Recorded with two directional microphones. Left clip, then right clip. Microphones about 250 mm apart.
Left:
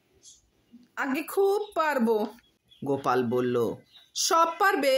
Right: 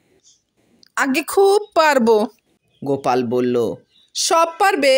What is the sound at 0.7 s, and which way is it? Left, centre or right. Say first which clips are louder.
Speech: right 11 dB; right.